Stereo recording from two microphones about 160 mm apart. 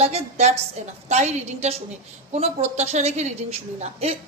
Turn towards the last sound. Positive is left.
turn(degrees=-40)  # may be behind; listen again after turning